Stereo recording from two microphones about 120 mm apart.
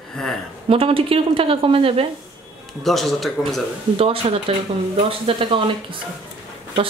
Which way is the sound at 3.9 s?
50° right (ahead or behind).